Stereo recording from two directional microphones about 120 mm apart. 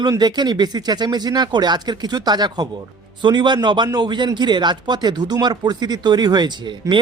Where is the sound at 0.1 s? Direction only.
35° right (ahead or behind).